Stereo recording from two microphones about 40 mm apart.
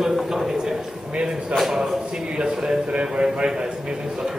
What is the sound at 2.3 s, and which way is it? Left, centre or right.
A man's voice, right.